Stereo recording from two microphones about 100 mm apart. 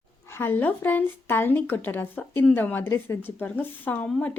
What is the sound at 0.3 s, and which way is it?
Speech, 20° left (ahead or behind).